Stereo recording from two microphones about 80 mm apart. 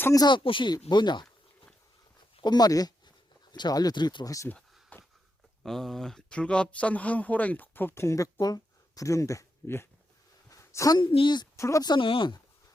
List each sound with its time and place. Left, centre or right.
0.3 s speech: left
2.4 s speech: left
4.9 s a sound: left
5.6 s speech: centre; by 8.0 s left
8.0 s speech: left
10.5 s a sound: left
10.9 s speech: left
11.5 s speech: left
11.8 s speech: left